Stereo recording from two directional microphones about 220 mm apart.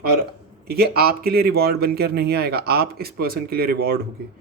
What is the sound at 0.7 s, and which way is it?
Speech, 45° right (ahead or behind).